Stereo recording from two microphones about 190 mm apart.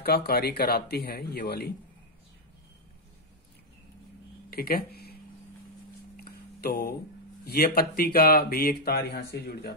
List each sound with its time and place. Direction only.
0.0 s speech: 55° left (ahead or behind)
4.5 s speech: 50° left (ahead or behind)
6.1 s a sound: 50° left (ahead or behind)
7.4 s speech: 55° left (ahead or behind)